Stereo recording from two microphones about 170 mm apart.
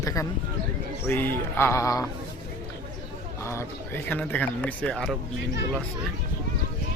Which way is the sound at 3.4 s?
15° left (ahead or behind).